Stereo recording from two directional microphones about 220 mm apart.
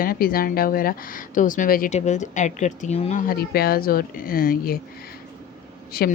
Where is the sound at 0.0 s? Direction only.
40° left (ahead or behind).